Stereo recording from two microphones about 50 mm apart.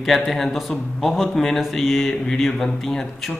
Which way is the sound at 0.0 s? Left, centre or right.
Centre.